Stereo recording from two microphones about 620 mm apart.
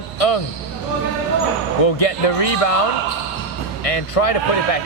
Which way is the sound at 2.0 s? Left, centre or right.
Left.